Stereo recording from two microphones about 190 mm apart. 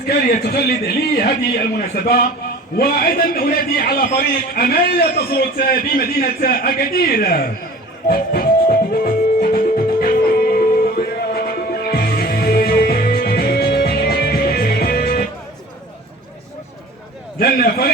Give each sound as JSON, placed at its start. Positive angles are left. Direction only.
{"t": 0.1, "sound": "a man's voice", "side_deg": 55}
{"t": 2.7, "sound": "a man's voice", "side_deg": 50}
{"t": 8.0, "sound": "music", "side_deg": 50}
{"t": 17.4, "sound": "a man's voice", "side_deg": 55}